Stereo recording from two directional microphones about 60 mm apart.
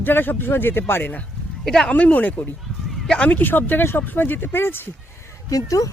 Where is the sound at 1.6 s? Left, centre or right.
Centre.